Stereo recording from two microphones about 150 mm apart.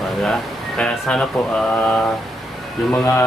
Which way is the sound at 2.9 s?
10° left (ahead or behind).